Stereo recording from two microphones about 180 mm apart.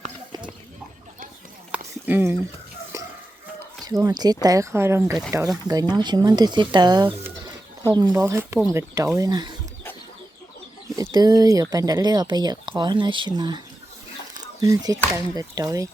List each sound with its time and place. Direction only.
1.7 s a sound: 10° right (ahead or behind)
3.8 s speech: 20° right (ahead or behind)
5.6 s speech: 20° right (ahead or behind)
10.9 s speech: 20° right (ahead or behind)
14.6 s speech: 20° right (ahead or behind)